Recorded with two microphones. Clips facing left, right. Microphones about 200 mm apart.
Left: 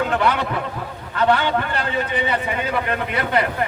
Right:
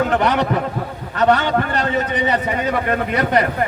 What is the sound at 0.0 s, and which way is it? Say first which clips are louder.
A man's voice: right 3 dB; 40° right (ahead or behind).